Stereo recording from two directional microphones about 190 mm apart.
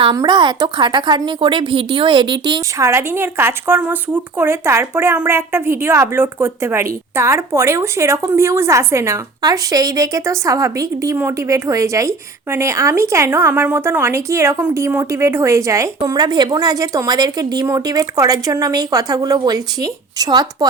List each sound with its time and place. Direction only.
0.0 s a woman's voice: 25° right (ahead or behind)